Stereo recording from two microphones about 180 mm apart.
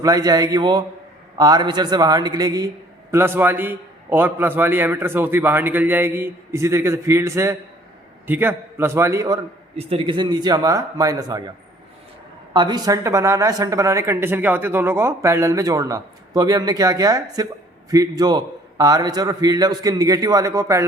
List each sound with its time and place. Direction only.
0.0 s a man's voice: 20° right (ahead or behind)
9.7 s a man's voice: 35° right (ahead or behind)
12.5 s a man's voice: 25° right (ahead or behind)